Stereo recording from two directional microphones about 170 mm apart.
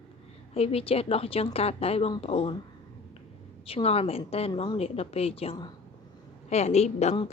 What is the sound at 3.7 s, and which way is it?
A woman's voice, 35° left (ahead or behind).